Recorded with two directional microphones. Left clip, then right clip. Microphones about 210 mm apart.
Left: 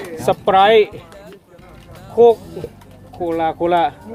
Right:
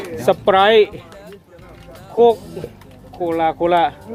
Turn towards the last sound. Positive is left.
turn(degrees=10)  # may be behind; listen again after turning